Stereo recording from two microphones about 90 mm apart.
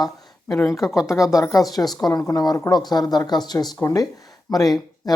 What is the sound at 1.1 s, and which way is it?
Speech, 35° left (ahead or behind).